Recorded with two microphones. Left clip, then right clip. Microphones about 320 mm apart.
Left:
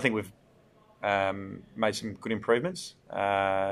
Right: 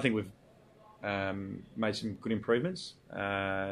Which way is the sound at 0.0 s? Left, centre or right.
Centre.